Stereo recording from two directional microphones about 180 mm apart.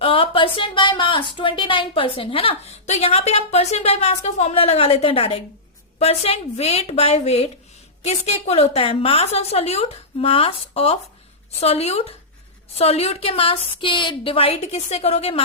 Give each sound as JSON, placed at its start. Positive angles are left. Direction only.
{"t": 0.0, "sound": "a woman's voice", "side_deg": 30}